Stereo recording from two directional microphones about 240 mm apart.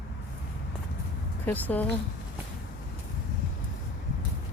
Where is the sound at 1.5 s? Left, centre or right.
Centre.